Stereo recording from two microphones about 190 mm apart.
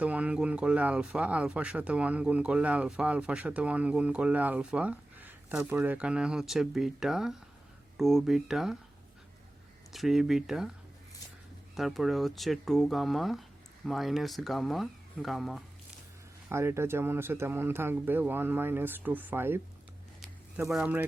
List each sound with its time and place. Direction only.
0.0 s speech: 5° right (ahead or behind)
9.9 s speech: centre (ahead or behind)
11.7 s speech: centre (ahead or behind)
16.5 s speech: 15° right (ahead or behind)
20.7 s speech: 10° right (ahead or behind)